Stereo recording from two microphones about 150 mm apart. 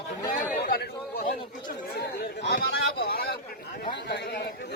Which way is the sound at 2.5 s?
90° left.